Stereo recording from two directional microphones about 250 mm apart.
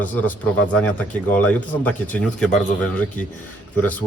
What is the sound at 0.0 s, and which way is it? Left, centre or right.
A man's voice, centre.